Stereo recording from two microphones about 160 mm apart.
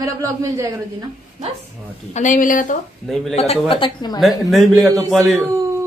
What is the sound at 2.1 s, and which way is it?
Speech, 50° left (ahead or behind).